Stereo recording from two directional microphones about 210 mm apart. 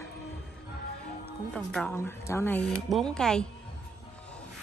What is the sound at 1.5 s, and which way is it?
A woman's voice, 5° left (ahead or behind).